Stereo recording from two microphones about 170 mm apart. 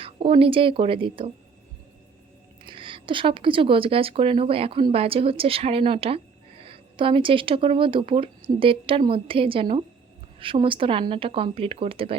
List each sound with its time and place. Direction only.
0.0 s a woman's voice: 35° right (ahead or behind)
2.6 s a woman's voice: 30° right (ahead or behind)